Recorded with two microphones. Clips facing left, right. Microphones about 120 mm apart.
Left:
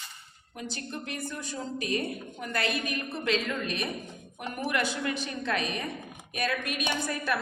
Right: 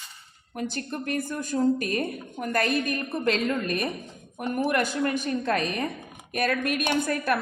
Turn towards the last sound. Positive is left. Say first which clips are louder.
# right 5 dB
turn(degrees=-55)  # may be behind; listen again after turning